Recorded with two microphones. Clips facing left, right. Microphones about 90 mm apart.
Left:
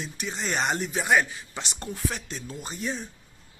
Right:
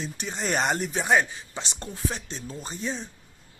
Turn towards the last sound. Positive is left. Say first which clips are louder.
# even
turn(degrees=-30)  # may be behind; listen again after turning